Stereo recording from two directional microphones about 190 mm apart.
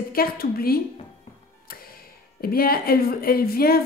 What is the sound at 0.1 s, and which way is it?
Speech, 50° left (ahead or behind).